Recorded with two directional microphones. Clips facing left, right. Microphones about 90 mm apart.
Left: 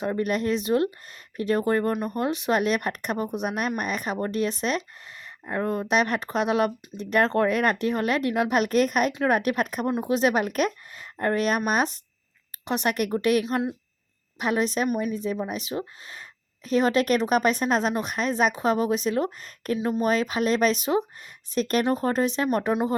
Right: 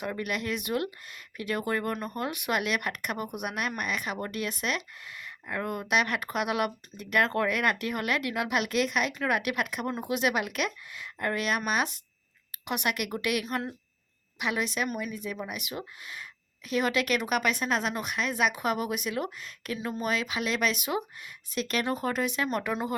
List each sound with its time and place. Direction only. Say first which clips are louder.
0.0 s speech: left 7 dB; 35° left (ahead or behind)